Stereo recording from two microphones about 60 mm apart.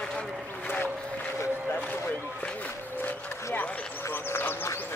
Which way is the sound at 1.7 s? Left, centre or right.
Left.